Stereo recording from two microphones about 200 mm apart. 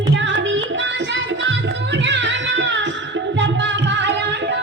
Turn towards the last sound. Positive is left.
turn(degrees=-60)  # may be behind; listen again after turning